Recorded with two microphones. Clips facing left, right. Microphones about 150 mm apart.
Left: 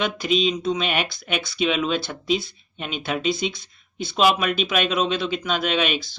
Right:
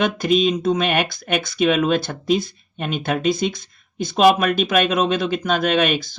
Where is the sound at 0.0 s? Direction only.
50° right (ahead or behind).